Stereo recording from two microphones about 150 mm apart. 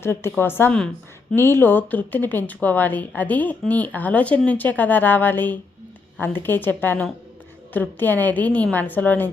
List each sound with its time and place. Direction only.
0.0 s a woman's voice: 15° left (ahead or behind)